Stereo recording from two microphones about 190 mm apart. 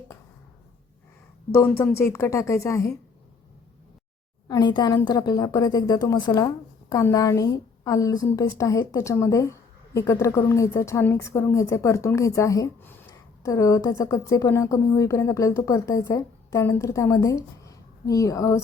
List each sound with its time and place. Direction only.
1.5 s a woman's voice: 10° left (ahead or behind)
4.4 s a woman's voice: 20° left (ahead or behind)